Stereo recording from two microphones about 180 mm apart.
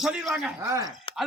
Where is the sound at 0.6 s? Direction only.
20° right (ahead or behind).